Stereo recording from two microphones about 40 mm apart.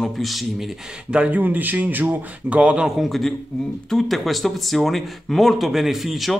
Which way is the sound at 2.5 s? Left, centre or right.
Right.